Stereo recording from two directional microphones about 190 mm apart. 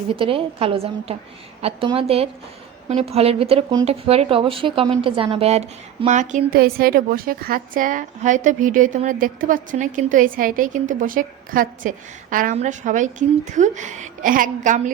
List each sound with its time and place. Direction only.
0.1 s a woman's voice: 30° right (ahead or behind)